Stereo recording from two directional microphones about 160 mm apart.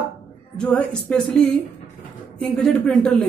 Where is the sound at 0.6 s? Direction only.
10° left (ahead or behind).